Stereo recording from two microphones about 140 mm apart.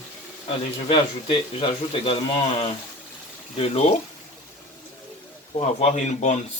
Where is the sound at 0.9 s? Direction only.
40° left (ahead or behind).